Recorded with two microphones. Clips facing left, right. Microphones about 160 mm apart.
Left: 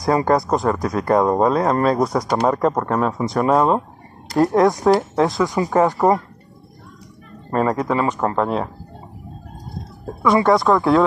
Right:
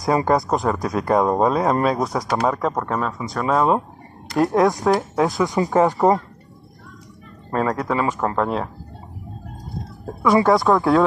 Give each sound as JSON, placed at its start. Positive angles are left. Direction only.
{"t": 0.0, "sound": "speech", "side_deg": -15}
{"t": 0.5, "sound": "speech", "side_deg": -5}
{"t": 5.4, "sound": "speech", "side_deg": -20}
{"t": 6.0, "sound": "speech", "side_deg": 0}
{"t": 7.5, "sound": "speech", "side_deg": 5}
{"t": 8.4, "sound": "speech", "side_deg": 0}
{"t": 10.2, "sound": "speech", "side_deg": 0}